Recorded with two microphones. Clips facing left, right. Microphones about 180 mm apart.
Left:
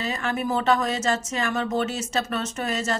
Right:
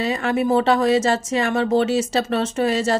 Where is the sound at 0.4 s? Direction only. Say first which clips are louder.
Right 5 dB; 30° right (ahead or behind).